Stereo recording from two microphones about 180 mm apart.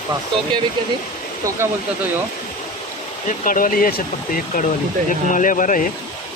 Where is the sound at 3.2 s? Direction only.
50° left (ahead or behind).